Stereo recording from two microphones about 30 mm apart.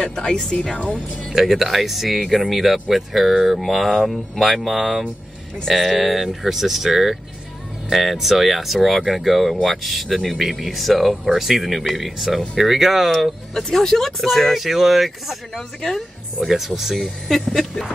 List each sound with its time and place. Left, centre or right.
0.0 s speech: left
1.3 s speech: centre
13.7 s speech: centre
14.4 s speech: centre
17.3 s a sound: centre